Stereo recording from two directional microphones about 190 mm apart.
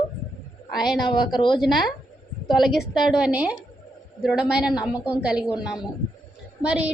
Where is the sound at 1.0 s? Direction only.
25° left (ahead or behind).